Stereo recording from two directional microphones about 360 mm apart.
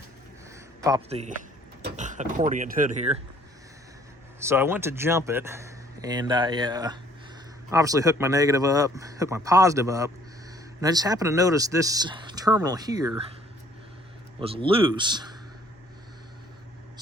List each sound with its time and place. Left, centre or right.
0.5 s a sound: centre
1.8 s speech: centre
4.4 s speech: centre
14.4 s speech: centre